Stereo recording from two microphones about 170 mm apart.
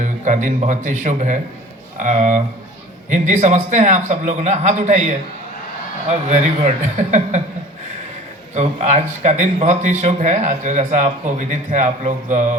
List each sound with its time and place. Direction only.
0.0 s a man's voice: 45° right (ahead or behind)
8.5 s a man's voice: 40° right (ahead or behind)